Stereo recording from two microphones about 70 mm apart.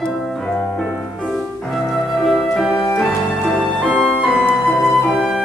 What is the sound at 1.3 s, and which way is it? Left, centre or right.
Music, centre.